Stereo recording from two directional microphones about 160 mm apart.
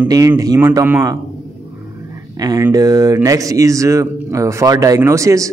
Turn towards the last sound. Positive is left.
turn(degrees=-20)  # may be behind; listen again after turning